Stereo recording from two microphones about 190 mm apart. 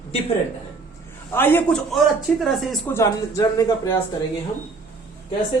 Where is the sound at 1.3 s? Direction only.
10° left (ahead or behind).